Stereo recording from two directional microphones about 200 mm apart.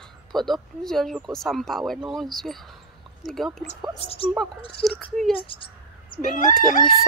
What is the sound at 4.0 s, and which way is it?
Speech, 30° left (ahead or behind).